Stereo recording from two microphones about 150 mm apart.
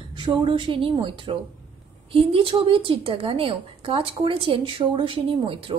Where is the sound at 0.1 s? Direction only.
30° right (ahead or behind).